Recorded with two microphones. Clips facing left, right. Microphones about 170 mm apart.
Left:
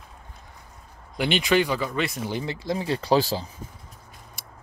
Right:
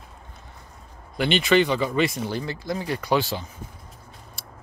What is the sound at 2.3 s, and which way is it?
Speech, 20° left (ahead or behind).